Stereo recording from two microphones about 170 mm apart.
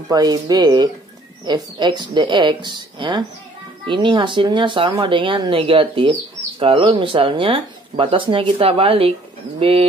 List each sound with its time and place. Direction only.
0.1 s speech: 25° right (ahead or behind)